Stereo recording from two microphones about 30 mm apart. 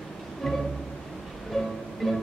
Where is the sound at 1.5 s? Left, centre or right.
Centre.